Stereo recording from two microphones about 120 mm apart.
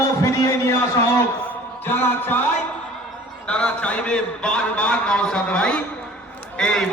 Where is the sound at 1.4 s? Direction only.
15° left (ahead or behind).